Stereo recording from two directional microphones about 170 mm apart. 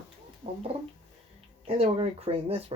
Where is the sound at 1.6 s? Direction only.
35° right (ahead or behind).